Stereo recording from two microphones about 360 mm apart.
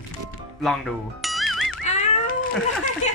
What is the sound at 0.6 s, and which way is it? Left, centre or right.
Music, centre.